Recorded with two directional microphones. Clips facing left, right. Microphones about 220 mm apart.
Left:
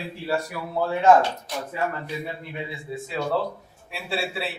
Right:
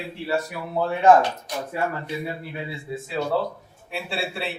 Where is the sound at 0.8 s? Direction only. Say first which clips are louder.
Right 1 dB; 20° right (ahead or behind).